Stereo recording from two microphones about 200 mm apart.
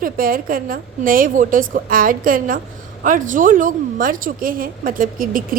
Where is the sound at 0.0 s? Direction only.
45° right (ahead or behind).